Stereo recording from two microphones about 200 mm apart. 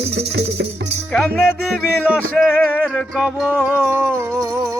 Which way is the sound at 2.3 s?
5° left (ahead or behind).